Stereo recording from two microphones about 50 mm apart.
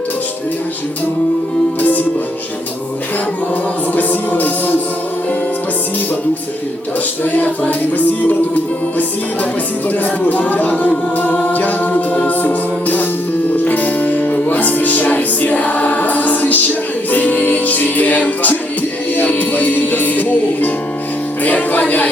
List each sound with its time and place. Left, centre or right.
1.8 s music: left
3.9 s music: left
7.3 s a capella: left
12.3 s music: left